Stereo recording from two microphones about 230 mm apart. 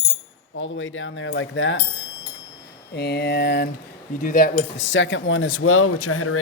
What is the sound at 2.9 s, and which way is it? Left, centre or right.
Speech, left.